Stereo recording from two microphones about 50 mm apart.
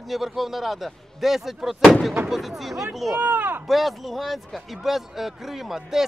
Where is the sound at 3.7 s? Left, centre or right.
Centre.